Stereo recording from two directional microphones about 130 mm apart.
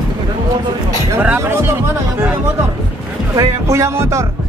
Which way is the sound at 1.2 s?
15° right (ahead or behind).